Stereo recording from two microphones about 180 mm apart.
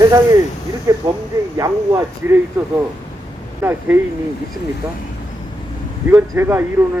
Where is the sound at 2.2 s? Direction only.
10° right (ahead or behind).